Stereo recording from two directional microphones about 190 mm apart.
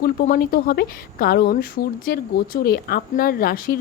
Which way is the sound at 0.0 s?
50° left (ahead or behind).